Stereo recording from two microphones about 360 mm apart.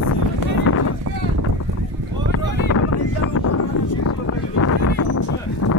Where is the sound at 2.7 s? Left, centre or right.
Left.